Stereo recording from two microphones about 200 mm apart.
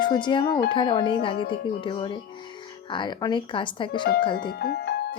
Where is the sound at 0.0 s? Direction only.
20° left (ahead or behind).